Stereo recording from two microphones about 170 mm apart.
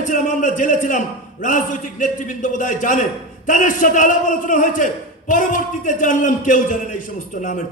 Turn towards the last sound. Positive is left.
turn(degrees=50)  # may be behind; listen again after turning